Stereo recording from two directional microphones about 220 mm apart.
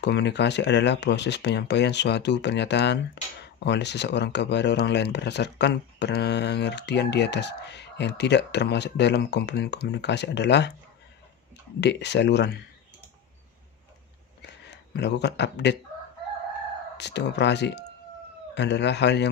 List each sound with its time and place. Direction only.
0.0 s speech: 50° left (ahead or behind)
11.8 s speech: 50° left (ahead or behind)
14.4 s a sound: 50° left (ahead or behind)
16.9 s speech: 50° left (ahead or behind)